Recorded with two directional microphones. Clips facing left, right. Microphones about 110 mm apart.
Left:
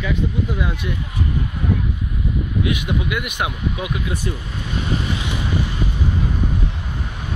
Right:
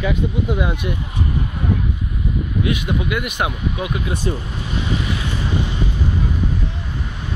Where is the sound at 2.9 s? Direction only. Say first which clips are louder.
Right 2 dB; 30° right (ahead or behind).